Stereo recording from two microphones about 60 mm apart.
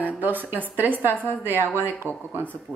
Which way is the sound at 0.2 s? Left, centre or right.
Right.